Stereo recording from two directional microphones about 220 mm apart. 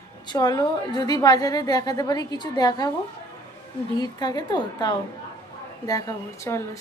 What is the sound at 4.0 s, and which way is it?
A woman's voice, 20° left (ahead or behind).